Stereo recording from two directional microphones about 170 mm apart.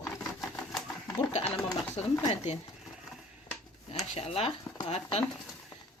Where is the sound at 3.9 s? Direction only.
35° left (ahead or behind).